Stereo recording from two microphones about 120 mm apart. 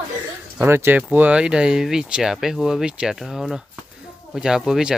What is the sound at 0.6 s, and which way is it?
Speech, 20° right (ahead or behind).